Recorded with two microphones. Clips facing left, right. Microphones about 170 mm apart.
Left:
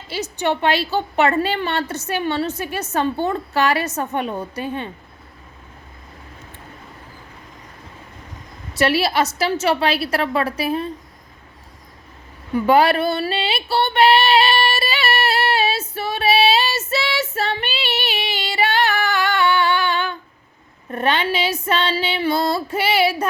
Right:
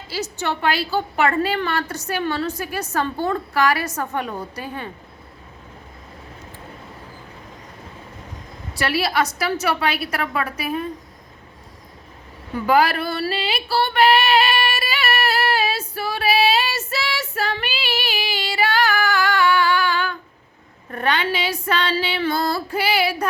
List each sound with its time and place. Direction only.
0.1 s a woman's voice: 20° left (ahead or behind)
8.7 s a woman's voice: 25° left (ahead or behind)
12.5 s child singing: 25° left (ahead or behind)
20.9 s a woman's voice: 25° left (ahead or behind)